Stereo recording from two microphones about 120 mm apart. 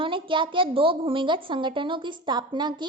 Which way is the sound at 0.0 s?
45° right (ahead or behind).